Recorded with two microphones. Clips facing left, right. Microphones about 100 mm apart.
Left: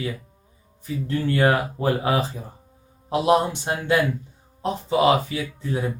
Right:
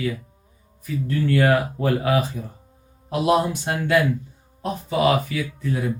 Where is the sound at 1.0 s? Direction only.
25° left (ahead or behind).